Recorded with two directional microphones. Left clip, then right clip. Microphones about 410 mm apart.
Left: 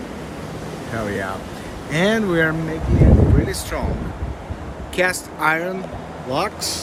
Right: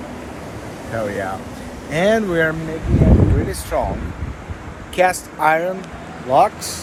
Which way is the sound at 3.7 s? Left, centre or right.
Centre.